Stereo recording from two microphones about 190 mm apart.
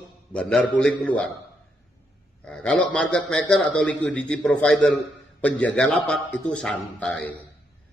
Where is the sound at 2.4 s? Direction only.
5° left (ahead or behind).